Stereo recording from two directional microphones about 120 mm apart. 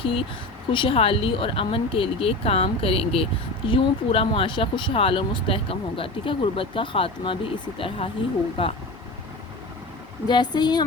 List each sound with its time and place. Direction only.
0.0 s speech: 50° left (ahead or behind)
10.2 s speech: 35° left (ahead or behind)